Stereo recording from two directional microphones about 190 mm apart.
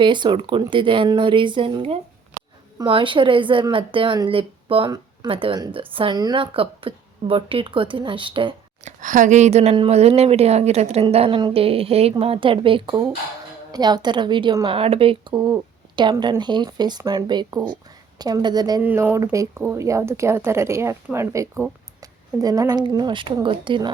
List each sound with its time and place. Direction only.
0.0 s speech: 25° right (ahead or behind)
9.0 s speech: 40° right (ahead or behind); by 18.8 s 20° right (ahead or behind)
18.8 s speech: 10° right (ahead or behind); by 23.9 s 25° right (ahead or behind)